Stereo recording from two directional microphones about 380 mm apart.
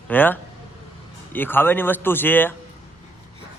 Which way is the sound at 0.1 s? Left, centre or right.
Centre.